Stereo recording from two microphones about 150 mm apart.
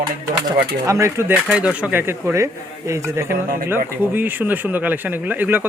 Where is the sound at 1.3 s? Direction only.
10° right (ahead or behind).